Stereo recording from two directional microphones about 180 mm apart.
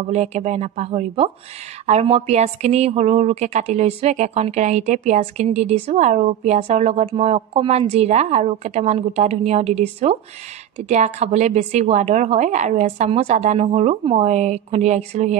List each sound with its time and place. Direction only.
0.1 s a woman's voice: 40° right (ahead or behind)